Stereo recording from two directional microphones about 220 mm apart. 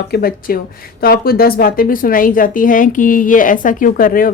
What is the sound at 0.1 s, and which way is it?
A woman's voice, 45° left (ahead or behind).